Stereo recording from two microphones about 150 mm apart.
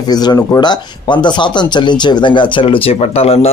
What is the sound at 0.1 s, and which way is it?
Speech, 25° left (ahead or behind).